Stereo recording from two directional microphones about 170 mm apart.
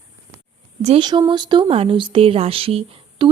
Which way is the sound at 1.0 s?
25° right (ahead or behind).